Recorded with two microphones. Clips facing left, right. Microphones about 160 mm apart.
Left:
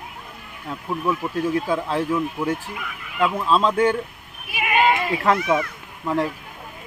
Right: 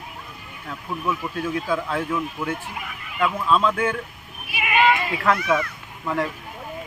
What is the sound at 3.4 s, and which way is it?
Speech, 30° left (ahead or behind).